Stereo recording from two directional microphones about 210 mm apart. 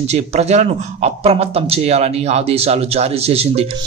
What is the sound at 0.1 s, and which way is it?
A man's voice, 30° right (ahead or behind).